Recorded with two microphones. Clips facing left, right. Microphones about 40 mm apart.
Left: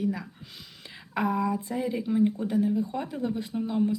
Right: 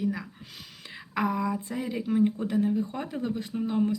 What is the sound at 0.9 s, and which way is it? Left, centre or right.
Speech, right.